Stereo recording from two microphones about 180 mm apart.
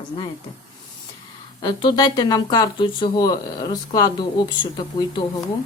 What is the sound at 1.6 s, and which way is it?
Speech, 25° left (ahead or behind).